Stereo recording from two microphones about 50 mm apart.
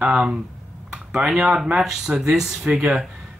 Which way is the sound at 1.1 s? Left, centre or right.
Centre.